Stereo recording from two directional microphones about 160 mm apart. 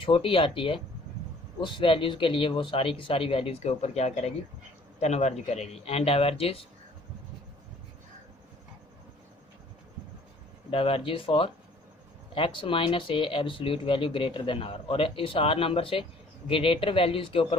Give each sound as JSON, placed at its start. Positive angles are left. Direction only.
{"t": 0.0, "sound": "speech", "side_deg": 35}
{"t": 10.7, "sound": "speech", "side_deg": 35}